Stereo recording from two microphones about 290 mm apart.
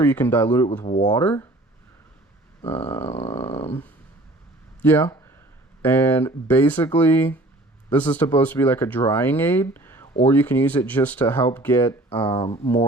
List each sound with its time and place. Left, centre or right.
0.0 s speech: centre
0.9 s speech: centre
1.1 s speech: centre
2.6 s speech: centre
3.7 s a sound: centre
4.8 s speech: centre
12.0 s speech: centre